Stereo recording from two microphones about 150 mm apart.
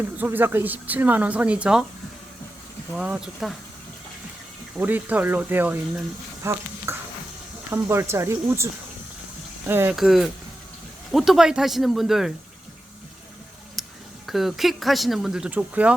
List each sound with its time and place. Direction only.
0.0 s speech: 15° right (ahead or behind)
3.0 s speech: 5° right (ahead or behind)
4.8 s speech: 10° right (ahead or behind)
9.9 s speech: centre (ahead or behind)
13.8 s tick-tock: centre (ahead or behind)
14.3 s speech: centre (ahead or behind)